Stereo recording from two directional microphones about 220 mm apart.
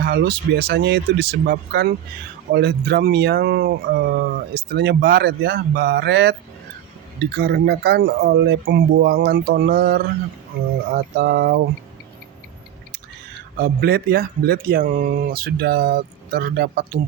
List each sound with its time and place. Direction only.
0.0 s speech: 45° right (ahead or behind)
13.6 s speech: 45° right (ahead or behind)